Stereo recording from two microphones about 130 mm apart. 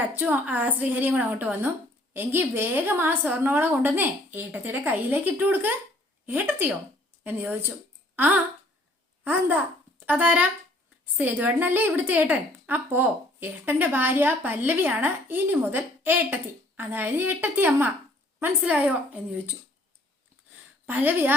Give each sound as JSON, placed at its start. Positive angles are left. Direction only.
{"t": 0.1, "sound": "a woman's voice", "side_deg": -15}
{"t": 20.8, "sound": "a woman's voice", "side_deg": -15}